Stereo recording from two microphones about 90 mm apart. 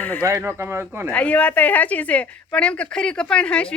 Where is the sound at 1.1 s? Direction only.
15° left (ahead or behind).